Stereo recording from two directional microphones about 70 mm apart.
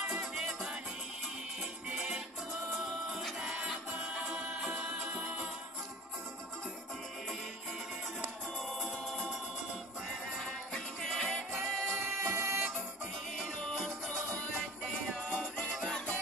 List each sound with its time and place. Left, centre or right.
0.0 s music: centre
1.9 s music: centre
2.8 s music: centre
10.7 s music: centre
12.2 s music: right
13.6 s music: centre